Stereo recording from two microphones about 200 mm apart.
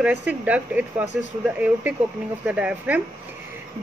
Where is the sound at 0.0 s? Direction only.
5° right (ahead or behind).